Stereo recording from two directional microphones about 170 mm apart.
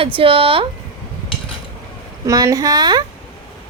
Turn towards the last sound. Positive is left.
turn(degrees=-25)  # may be behind; listen again after turning